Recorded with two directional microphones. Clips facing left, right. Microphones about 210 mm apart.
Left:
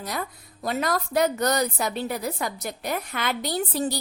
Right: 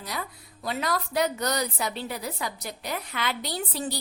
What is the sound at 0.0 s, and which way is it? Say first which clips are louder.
A woman's voice: left 4 dB; 50° left (ahead or behind).